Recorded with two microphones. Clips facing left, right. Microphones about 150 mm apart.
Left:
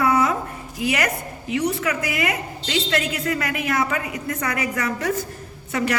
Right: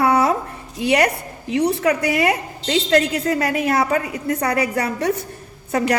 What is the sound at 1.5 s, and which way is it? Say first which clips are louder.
A woman's voice: right 5 dB; 30° right (ahead or behind).